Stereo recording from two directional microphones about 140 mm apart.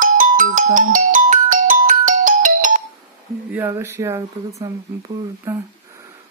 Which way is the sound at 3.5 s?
15° right (ahead or behind).